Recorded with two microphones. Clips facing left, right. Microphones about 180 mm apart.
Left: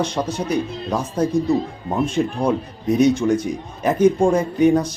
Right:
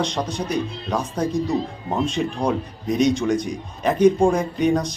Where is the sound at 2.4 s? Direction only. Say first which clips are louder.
Left 3 dB; 10° left (ahead or behind).